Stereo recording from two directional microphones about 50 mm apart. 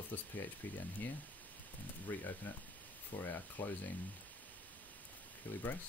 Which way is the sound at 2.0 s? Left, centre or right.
Left.